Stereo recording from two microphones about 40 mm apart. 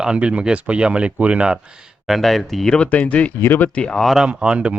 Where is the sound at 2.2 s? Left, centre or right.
Centre.